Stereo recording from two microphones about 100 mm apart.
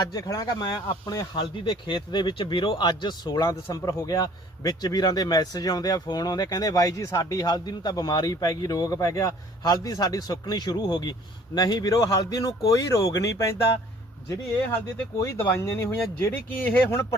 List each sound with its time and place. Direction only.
0.0 s speech: 35° left (ahead or behind)
15.2 s speech: 25° left (ahead or behind)